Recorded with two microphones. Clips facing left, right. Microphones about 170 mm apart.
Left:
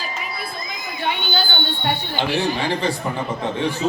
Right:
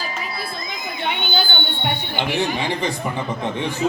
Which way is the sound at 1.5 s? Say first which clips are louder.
Left 1 dB; 55° right (ahead or behind).